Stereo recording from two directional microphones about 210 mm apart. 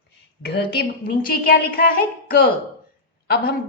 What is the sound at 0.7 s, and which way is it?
A woman's voice, 45° left (ahead or behind).